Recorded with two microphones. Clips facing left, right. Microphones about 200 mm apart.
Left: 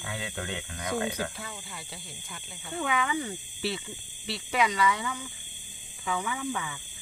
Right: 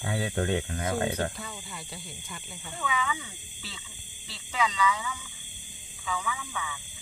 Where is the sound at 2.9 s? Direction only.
60° left (ahead or behind).